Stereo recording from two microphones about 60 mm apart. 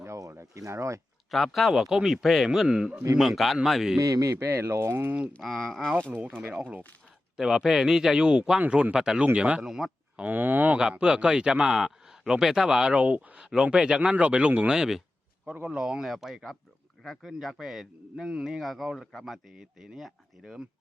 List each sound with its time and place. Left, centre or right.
0.0 s speech: right
1.3 s speech: centre
3.2 s speech: centre
3.9 s speech: right
5.4 s speech: centre
6.1 s speech: right
7.3 s a man's voice: centre
9.6 s speech: centre
10.3 s speech: right
10.8 s a man's voice: centre
13.5 s a man's voice: centre
14.7 s a man's voice: centre